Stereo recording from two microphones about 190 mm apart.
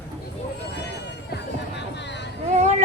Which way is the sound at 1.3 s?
65° left (ahead or behind).